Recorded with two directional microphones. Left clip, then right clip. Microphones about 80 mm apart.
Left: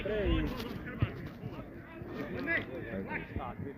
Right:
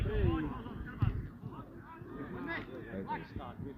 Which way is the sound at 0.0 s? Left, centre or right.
Right.